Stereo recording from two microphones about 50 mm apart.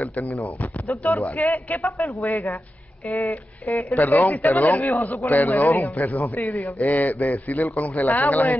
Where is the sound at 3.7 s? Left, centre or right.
Left.